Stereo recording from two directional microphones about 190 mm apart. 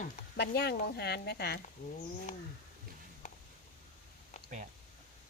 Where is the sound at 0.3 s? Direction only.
60° left (ahead or behind).